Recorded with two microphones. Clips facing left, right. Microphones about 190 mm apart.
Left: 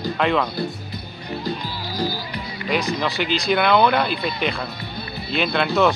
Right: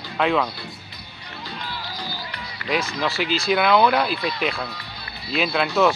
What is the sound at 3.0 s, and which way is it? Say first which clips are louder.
Speech: left 1 dB; centre (ahead or behind).